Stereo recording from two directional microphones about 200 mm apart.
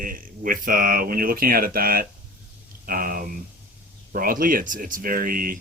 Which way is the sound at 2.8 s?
45° right (ahead or behind).